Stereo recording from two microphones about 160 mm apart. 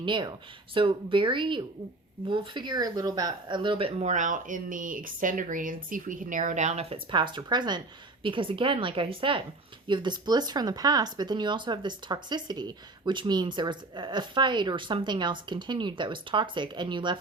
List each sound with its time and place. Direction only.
0.0 s speech: 30° right (ahead or behind)
4.1 s speech: 55° right (ahead or behind); by 17.2 s 30° right (ahead or behind)